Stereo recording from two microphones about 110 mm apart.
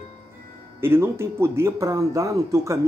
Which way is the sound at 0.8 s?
20° right (ahead or behind).